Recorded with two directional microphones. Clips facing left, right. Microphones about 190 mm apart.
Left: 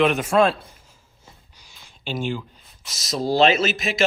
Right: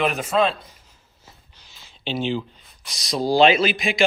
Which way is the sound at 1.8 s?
50° left (ahead or behind).